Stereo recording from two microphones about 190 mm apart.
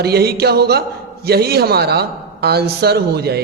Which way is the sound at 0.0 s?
55° right (ahead or behind).